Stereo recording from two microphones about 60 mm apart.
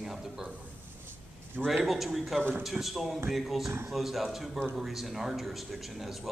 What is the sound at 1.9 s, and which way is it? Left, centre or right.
Speech, centre.